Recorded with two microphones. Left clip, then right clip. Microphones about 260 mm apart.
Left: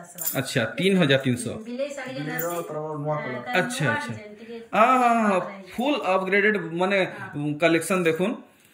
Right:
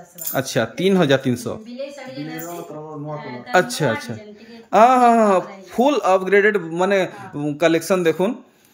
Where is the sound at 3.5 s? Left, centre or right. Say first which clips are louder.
Right 7 dB; centre.